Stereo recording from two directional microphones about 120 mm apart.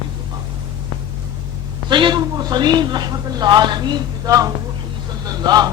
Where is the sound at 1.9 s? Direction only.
40° right (ahead or behind).